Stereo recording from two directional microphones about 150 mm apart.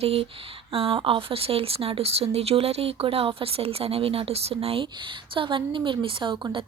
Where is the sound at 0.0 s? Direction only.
40° right (ahead or behind).